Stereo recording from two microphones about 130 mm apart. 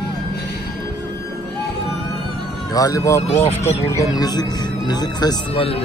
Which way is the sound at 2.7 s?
25° left (ahead or behind).